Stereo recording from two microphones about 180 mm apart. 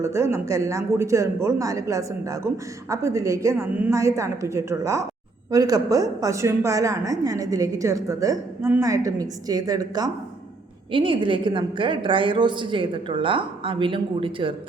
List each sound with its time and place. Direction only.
0.0 s a woman's voice: 15° right (ahead or behind)